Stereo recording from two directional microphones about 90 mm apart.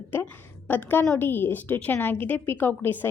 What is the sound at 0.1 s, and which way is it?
A woman's voice, 20° left (ahead or behind).